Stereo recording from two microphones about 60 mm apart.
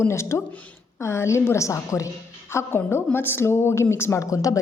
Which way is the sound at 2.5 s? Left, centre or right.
Left.